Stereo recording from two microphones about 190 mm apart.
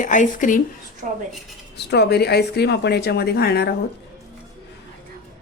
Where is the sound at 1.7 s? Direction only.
60° left (ahead or behind).